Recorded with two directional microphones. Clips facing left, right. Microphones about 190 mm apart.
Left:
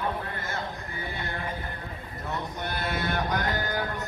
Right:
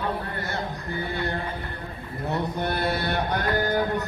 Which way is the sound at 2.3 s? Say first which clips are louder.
Right 7 dB; 35° right (ahead or behind).